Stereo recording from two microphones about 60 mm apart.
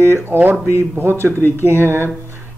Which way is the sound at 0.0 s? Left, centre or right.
Right.